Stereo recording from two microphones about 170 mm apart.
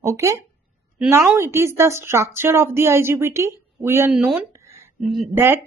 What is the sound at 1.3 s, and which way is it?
Speech, 15° right (ahead or behind).